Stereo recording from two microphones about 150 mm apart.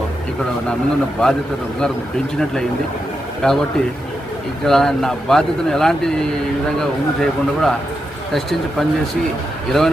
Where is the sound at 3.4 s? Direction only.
5° left (ahead or behind).